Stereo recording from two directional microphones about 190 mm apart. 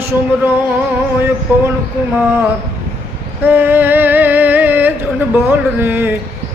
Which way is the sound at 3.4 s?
10° right (ahead or behind).